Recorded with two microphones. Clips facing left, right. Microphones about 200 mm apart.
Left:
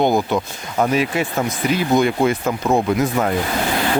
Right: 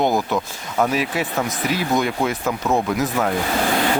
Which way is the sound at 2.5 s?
15° left (ahead or behind).